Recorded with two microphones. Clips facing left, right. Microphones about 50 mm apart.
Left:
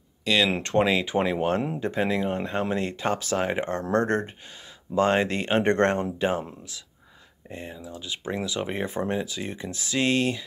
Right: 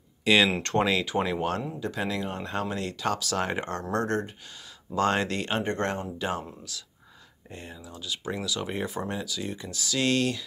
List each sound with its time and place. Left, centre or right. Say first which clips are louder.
0.2 s speech: right 2 dB; centre
0.6 s speech: left 3 dB; centre
3.3 s speech: left 3 dB; centre
3.9 s speech: left 4 dB; left
4.9 s speech: left 3 dB; centre
5.6 s speech: left 11 dB; left
6.1 s speech: left 5 dB; left